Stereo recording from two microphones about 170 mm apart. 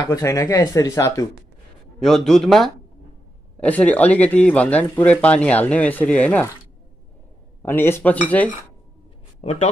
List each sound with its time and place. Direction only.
0.0 s speech: 20° left (ahead or behind)
2.0 s a man's voice: centre (ahead or behind)
7.6 s speech: 15° left (ahead or behind)
9.4 s speech: 40° left (ahead or behind)